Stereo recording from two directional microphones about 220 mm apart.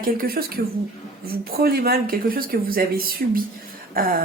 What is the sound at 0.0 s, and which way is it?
Speech, 40° right (ahead or behind).